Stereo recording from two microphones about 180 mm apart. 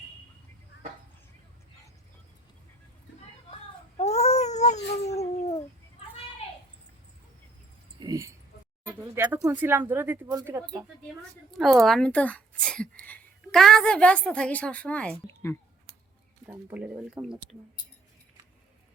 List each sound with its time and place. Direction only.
3.9 s a sound: 35° left (ahead or behind)
5.0 s dog: 35° left (ahead or behind)
7.9 s keys jangling: 20° right (ahead or behind)
9.1 s speech: 10° right (ahead or behind)
10.8 s a woman's voice: 5° right (ahead or behind); by 15.5 s 15° left (ahead or behind)
16.5 s speech: 10° right (ahead or behind)